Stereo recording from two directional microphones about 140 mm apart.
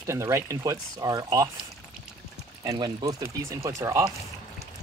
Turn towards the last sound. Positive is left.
turn(degrees=-20)  # may be behind; listen again after turning